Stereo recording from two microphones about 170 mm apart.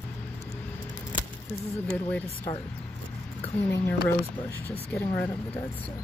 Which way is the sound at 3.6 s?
10° left (ahead or behind).